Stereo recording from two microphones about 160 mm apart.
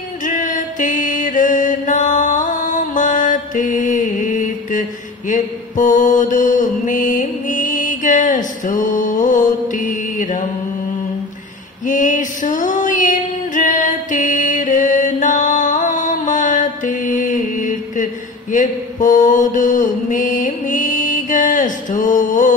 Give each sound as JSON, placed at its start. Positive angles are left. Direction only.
{"t": 0.2, "sound": "mantra", "side_deg": 55}
{"t": 11.8, "sound": "female singing", "side_deg": 55}
{"t": 18.5, "sound": "mantra", "side_deg": 55}